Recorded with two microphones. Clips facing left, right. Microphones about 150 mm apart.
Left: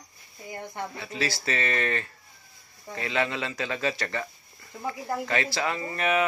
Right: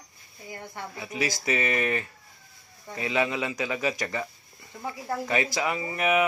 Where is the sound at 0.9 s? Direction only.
15° right (ahead or behind).